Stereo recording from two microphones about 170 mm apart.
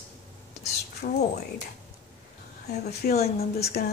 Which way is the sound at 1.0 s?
50° left (ahead or behind).